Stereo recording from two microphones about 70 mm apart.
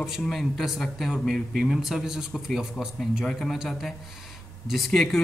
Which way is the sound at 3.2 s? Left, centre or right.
Centre.